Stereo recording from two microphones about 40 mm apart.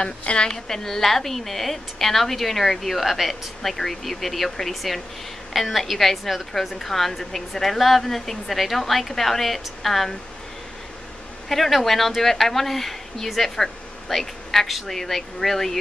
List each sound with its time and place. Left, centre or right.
0.2 s a woman's voice: left
0.5 s a woman's voice: centre
11.4 s speech: centre